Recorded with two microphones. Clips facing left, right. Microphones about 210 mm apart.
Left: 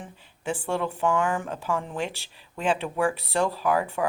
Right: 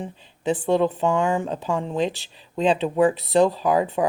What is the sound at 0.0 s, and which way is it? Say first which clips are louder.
Speech: right 7 dB; 20° right (ahead or behind).